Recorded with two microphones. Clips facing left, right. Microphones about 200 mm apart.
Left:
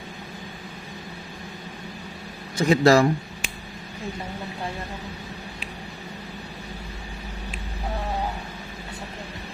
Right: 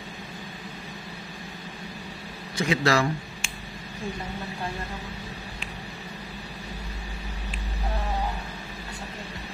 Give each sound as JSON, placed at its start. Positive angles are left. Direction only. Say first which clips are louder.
{"t": 2.5, "sound": "speech", "louder": "left 7 dB", "side_deg": 40}